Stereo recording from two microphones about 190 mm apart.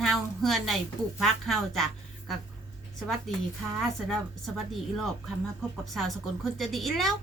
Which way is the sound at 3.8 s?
Centre (ahead or behind).